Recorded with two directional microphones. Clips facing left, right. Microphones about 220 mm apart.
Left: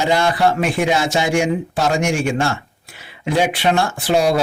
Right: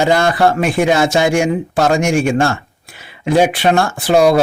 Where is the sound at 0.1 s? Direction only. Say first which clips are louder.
Right 3 dB; 50° right (ahead or behind).